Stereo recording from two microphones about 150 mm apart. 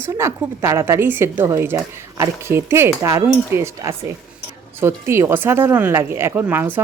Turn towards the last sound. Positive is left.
turn(degrees=-10)  # may be behind; listen again after turning